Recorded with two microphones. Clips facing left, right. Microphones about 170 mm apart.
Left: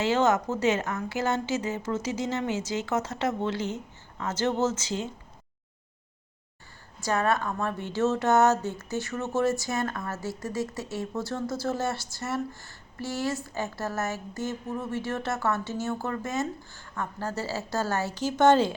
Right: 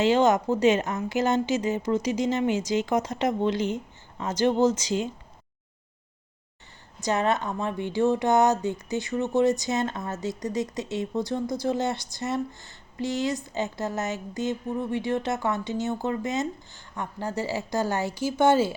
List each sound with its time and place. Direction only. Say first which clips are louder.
0.0 s a woman's voice: right 3 dB; 15° right (ahead or behind)
7.0 s a woman's voice: right 1 dB; 20° right (ahead or behind)